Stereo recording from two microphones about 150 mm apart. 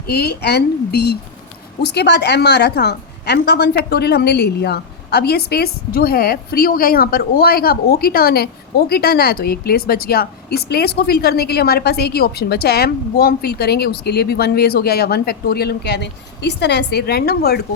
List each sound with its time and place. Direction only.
0.1 s a woman's voice: 90° left